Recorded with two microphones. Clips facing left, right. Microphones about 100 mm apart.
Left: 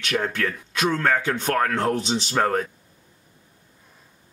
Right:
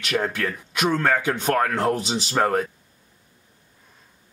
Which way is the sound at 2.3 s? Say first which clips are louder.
Right 1 dB; 15° right (ahead or behind).